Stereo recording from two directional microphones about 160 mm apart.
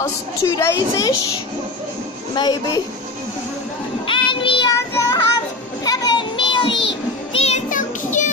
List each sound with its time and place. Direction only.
0.0 s a woman's voice: 20° left (ahead or behind)
2.3 s a woman's voice: 25° left (ahead or behind)
4.1 s music: 30° left (ahead or behind)
4.7 s child singing: 20° left (ahead or behind)
7.3 s music: 45° left (ahead or behind)